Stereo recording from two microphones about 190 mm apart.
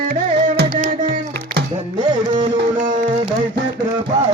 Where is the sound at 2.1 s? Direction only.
25° right (ahead or behind).